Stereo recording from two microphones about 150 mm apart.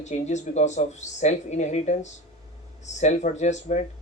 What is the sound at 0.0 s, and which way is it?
Speech, 50° left (ahead or behind).